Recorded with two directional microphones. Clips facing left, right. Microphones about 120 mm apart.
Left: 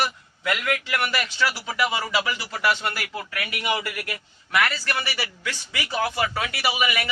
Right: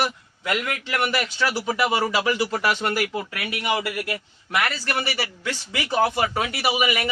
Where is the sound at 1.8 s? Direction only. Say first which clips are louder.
Right 1 dB; 30° right (ahead or behind).